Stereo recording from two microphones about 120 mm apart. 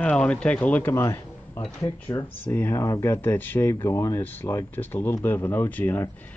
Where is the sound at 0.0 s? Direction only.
10° left (ahead or behind).